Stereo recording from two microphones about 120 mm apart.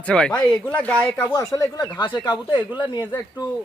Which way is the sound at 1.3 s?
30° left (ahead or behind).